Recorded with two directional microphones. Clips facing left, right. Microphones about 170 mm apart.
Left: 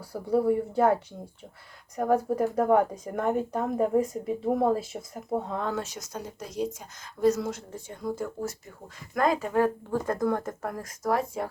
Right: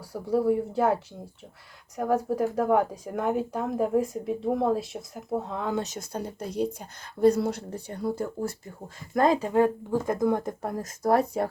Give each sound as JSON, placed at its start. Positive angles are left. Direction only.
{"t": 0.0, "sound": "speech", "side_deg": 0}
{"t": 5.6, "sound": "speech", "side_deg": -15}
{"t": 6.1, "sound": "speech", "side_deg": -30}
{"t": 6.4, "sound": "speech", "side_deg": -60}
{"t": 7.4, "sound": "speech", "side_deg": -35}
{"t": 11.1, "sound": "speech", "side_deg": -40}